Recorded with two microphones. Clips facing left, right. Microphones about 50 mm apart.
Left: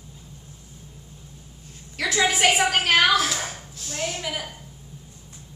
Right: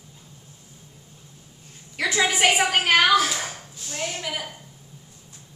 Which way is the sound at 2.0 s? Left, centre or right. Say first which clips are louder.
Even; centre.